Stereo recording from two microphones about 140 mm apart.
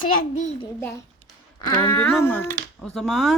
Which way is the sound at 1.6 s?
25° left (ahead or behind).